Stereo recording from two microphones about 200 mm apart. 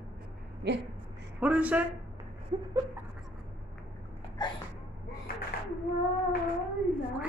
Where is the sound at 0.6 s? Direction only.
60° right (ahead or behind).